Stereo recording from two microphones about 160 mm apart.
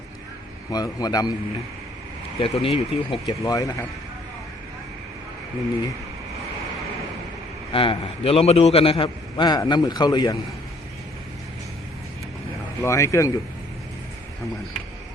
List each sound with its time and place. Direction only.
0.7 s a man's voice: 25° left (ahead or behind)
2.4 s a man's voice: 35° left (ahead or behind)
3.2 s a man's voice: 20° left (ahead or behind)
7.7 s a man's voice: 35° left (ahead or behind)
12.8 s a man's voice: 20° left (ahead or behind)